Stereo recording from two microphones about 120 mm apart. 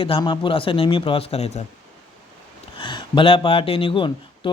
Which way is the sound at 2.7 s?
40° left (ahead or behind).